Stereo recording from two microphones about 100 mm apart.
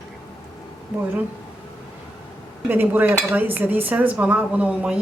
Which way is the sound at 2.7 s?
20° right (ahead or behind).